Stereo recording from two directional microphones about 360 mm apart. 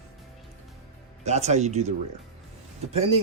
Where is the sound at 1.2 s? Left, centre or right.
Centre.